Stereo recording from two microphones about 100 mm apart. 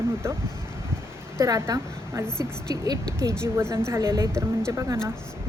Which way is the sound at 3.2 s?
25° right (ahead or behind).